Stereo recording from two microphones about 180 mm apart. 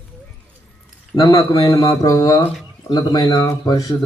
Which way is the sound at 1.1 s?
20° left (ahead or behind).